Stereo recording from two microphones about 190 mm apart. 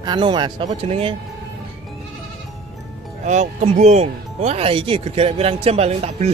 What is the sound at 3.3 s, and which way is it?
Speech, 35° right (ahead or behind).